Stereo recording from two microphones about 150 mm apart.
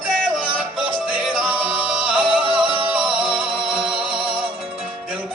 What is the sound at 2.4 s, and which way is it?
Music, 35° right (ahead or behind).